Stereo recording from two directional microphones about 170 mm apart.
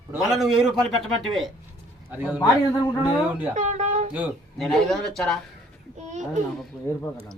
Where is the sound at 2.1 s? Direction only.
10° right (ahead or behind).